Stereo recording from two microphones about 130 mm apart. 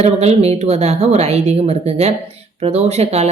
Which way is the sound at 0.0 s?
55° right (ahead or behind).